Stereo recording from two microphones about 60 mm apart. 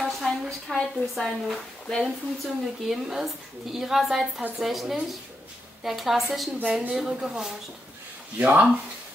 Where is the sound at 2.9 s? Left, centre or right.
Centre.